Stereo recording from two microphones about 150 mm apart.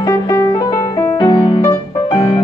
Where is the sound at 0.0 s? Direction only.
20° left (ahead or behind).